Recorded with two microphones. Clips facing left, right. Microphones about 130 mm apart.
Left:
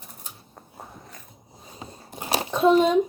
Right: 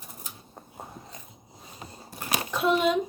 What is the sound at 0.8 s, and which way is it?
Biting, 20° right (ahead or behind).